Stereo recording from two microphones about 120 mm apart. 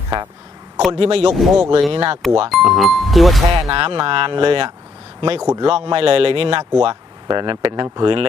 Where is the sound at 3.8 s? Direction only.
50° right (ahead or behind).